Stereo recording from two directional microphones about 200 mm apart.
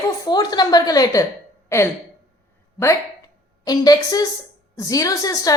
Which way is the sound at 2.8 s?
15° left (ahead or behind).